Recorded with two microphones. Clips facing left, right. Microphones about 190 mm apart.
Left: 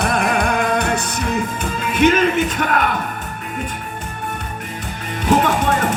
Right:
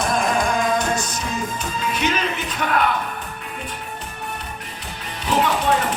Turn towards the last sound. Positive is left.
turn(degrees=50)  # may be behind; listen again after turning